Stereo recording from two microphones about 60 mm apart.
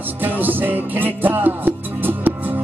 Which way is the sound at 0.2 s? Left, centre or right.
Right.